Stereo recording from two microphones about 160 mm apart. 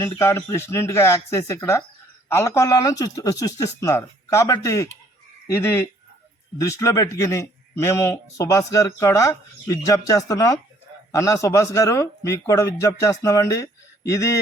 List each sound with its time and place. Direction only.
0.0 s speech: 15° left (ahead or behind)